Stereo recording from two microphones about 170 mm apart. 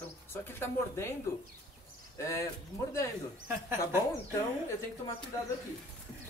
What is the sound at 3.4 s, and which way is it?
Speech, 15° right (ahead or behind).